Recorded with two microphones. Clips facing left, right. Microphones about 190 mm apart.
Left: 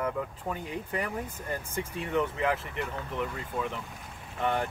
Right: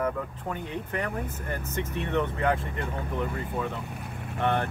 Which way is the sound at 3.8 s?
65° right (ahead or behind).